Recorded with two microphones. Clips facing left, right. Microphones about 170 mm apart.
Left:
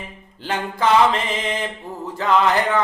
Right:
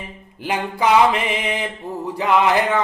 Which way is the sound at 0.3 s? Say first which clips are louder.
Right 2 dB; 15° right (ahead or behind).